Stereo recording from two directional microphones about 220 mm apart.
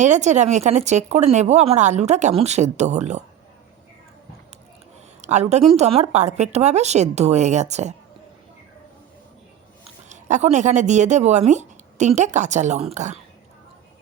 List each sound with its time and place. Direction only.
0.0 s speech: 30° right (ahead or behind)
5.2 s speech: 30° right (ahead or behind)
10.1 s speech: 35° right (ahead or behind)